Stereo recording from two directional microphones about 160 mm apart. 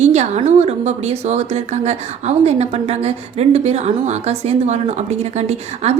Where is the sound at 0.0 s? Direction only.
45° right (ahead or behind).